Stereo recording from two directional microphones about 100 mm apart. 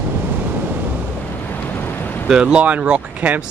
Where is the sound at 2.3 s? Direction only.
10° right (ahead or behind).